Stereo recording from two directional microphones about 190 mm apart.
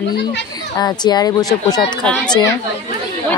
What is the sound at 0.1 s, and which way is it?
Speech, 60° left (ahead or behind).